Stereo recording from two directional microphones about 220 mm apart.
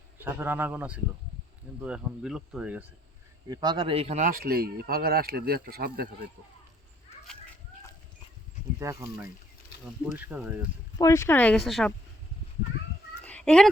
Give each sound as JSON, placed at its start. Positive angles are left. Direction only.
{"t": 0.2, "sound": "a man's voice", "side_deg": -10}
{"t": 3.5, "sound": "speech", "side_deg": -20}
{"t": 8.8, "sound": "a man's voice", "side_deg": -15}
{"t": 10.9, "sound": "speech", "side_deg": 15}
{"t": 13.2, "sound": "a sound", "side_deg": 5}